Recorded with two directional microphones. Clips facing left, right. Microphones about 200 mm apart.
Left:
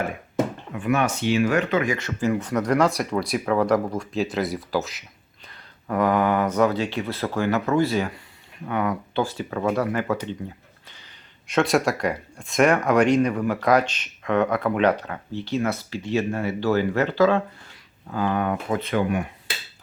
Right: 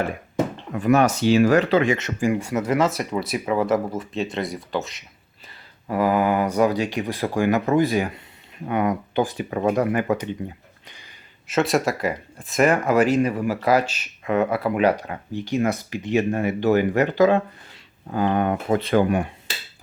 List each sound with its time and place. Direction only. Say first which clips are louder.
0.7 s speech: right 9 dB; 40° right (ahead or behind); by 10.2 s 15° right (ahead or behind)
11.4 s speech: even; centre (ahead or behind); by 19.3 s 35° right (ahead or behind)